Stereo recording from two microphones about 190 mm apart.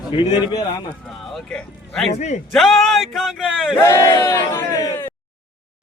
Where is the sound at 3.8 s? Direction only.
15° left (ahead or behind).